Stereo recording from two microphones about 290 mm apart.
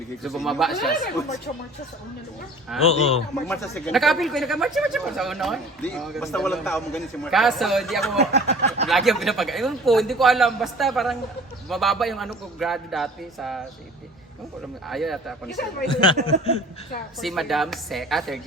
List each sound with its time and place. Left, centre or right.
0.2 s speech: centre
2.8 s speech: left
3.4 s speech: centre
8.2 s a sound: right
8.9 s speech: centre
14.8 s speech: centre
15.9 s speech: centre
17.2 s speech: centre